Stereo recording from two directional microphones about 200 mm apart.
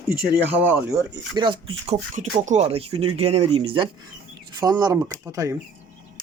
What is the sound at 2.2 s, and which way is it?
Speech, 35° right (ahead or behind).